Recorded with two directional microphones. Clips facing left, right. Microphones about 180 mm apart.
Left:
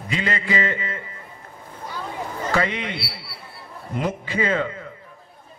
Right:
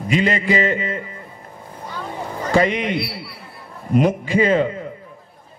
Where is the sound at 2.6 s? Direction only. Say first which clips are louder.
Right 7 dB; 15° right (ahead or behind).